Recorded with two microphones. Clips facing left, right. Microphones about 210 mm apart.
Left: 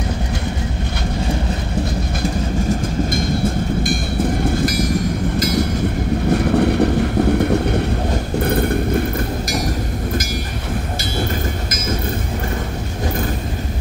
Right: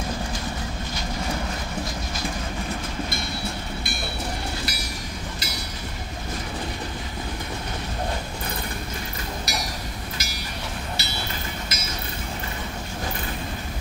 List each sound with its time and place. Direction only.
4.6 s train: 50° left (ahead or behind)
6.3 s vehicle: 65° left (ahead or behind)